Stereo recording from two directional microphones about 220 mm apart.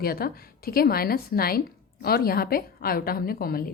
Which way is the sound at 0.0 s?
45° left (ahead or behind).